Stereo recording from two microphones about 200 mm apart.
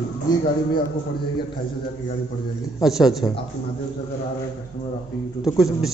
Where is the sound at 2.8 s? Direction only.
Centre (ahead or behind).